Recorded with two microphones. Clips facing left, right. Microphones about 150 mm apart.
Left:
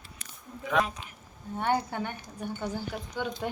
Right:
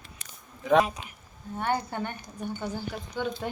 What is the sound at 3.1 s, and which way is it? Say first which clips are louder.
Speech: right 2 dB; 10° left (ahead or behind).